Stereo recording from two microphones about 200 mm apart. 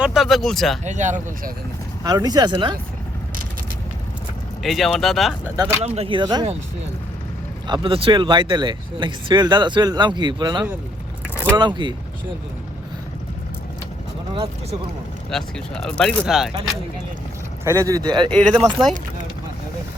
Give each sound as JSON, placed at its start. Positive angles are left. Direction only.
{"t": 0.0, "sound": "speech", "side_deg": 0}
{"t": 0.9, "sound": "speech", "side_deg": -35}
{"t": 2.0, "sound": "speech", "side_deg": -20}
{"t": 4.6, "sound": "speech", "side_deg": 0}
{"t": 5.8, "sound": "speech", "side_deg": -30}
{"t": 7.7, "sound": "speech", "side_deg": -25}
{"t": 14.3, "sound": "speech", "side_deg": -25}
{"t": 15.3, "sound": "speech", "side_deg": 5}
{"t": 17.7, "sound": "speech", "side_deg": -15}
{"t": 18.3, "sound": "speech", "side_deg": 5}